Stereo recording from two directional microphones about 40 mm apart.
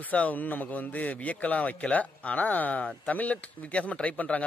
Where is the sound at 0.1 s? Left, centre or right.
Left.